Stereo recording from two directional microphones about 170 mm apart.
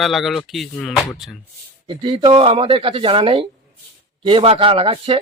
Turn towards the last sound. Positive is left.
turn(degrees=-30)  # may be behind; listen again after turning